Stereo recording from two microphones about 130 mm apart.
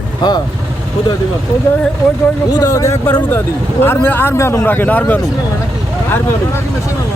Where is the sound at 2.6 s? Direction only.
25° left (ahead or behind).